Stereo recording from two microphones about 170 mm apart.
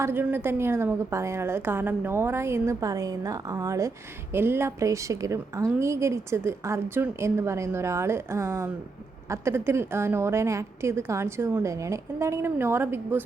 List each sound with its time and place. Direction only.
0.0 s a woman's voice: 15° right (ahead or behind)